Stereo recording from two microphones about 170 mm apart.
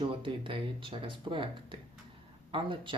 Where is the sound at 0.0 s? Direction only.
30° right (ahead or behind).